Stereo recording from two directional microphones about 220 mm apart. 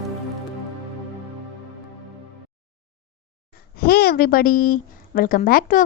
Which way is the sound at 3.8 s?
45° left (ahead or behind).